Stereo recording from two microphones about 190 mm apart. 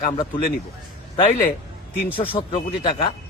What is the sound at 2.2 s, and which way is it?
Speech, 30° left (ahead or behind).